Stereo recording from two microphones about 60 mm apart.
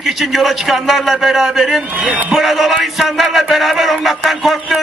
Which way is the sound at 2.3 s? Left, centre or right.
Centre.